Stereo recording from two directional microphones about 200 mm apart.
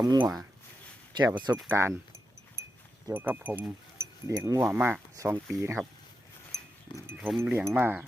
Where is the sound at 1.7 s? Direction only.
15° right (ahead or behind).